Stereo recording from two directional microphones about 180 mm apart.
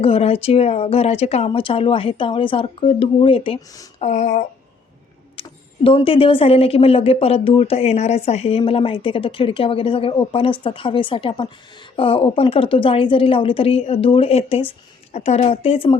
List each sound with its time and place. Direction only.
0.0 s speech: 35° left (ahead or behind)
4.0 s speech: 40° left (ahead or behind)
5.4 s a woman's voice: 30° left (ahead or behind)